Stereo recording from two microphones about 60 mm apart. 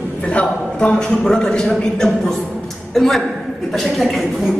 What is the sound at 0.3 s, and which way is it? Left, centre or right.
A man's voice, centre.